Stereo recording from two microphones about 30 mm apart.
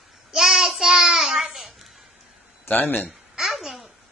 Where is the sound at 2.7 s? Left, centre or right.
Left.